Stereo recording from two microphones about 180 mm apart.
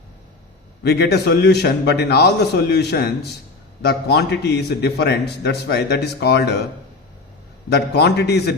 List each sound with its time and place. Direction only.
0.9 s a man's voice: 65° left (ahead or behind)
7.7 s a man's voice: 65° left (ahead or behind)